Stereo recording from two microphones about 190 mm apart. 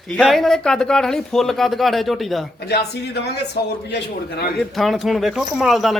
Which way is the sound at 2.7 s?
60° left (ahead or behind).